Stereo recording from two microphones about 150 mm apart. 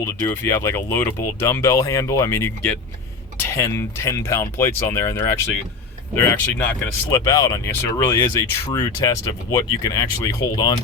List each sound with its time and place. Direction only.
0.0 s speech: 15° left (ahead or behind)